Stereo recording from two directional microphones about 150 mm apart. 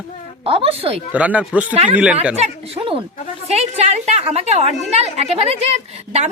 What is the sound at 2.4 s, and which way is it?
A woman's voice, 45° right (ahead or behind).